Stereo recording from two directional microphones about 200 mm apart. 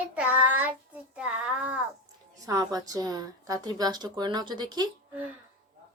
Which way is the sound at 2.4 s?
15° right (ahead or behind).